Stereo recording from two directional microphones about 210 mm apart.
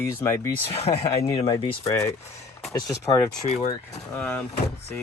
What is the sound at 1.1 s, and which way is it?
Speech, 15° left (ahead or behind).